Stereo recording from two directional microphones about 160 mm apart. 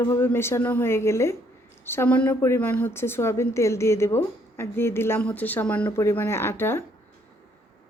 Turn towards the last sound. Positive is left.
turn(degrees=15)  # may be behind; listen again after turning